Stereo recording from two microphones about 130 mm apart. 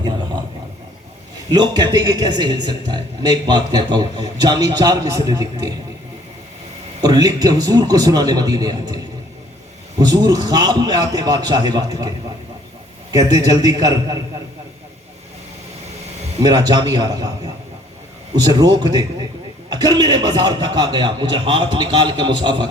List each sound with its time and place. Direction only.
1.5 s a man's voice: 30° right (ahead or behind)
7.0 s a man's voice: 30° right (ahead or behind)
10.0 s a man's voice: 30° right (ahead or behind)
13.1 s a man's voice: 30° right (ahead or behind)
16.4 s a man's voice: 30° right (ahead or behind)